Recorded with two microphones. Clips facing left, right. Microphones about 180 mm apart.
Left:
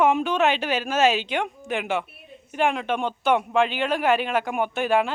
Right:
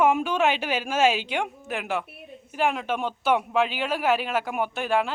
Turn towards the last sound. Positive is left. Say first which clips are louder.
# left 3 dB
turn(degrees=0)  # may be behind; listen again after turning